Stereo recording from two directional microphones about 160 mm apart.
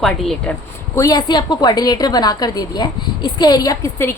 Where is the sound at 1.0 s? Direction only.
25° left (ahead or behind).